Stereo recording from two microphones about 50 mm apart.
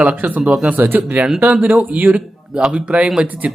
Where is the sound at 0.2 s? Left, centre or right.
Right.